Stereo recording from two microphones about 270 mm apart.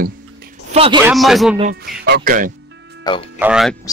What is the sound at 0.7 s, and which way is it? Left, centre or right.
Speech, right.